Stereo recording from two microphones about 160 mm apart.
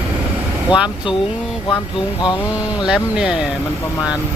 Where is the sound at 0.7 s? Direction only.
5° right (ahead or behind).